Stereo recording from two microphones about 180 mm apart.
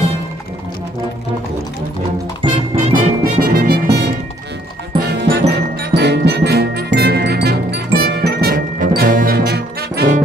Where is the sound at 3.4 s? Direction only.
55° right (ahead or behind).